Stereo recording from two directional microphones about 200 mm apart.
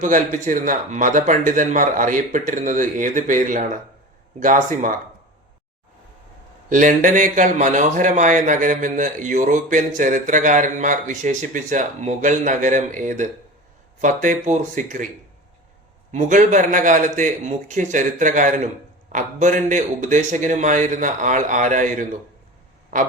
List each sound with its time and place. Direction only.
0.0 s speech: 40° right (ahead or behind)
6.7 s speech: 40° right (ahead or behind)
16.1 s speech: 40° right (ahead or behind)